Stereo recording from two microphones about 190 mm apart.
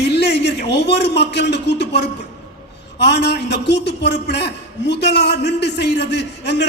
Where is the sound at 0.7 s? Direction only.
60° left (ahead or behind).